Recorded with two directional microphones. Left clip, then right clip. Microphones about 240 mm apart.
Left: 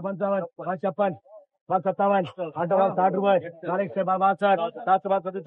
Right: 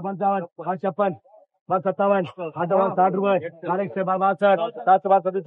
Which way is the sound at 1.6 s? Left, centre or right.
Right.